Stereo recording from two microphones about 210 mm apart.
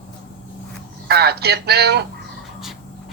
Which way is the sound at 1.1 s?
50° right (ahead or behind).